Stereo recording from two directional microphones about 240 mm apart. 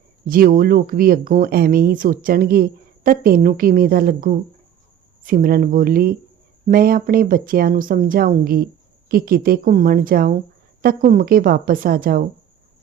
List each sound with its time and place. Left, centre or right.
0.3 s speech: right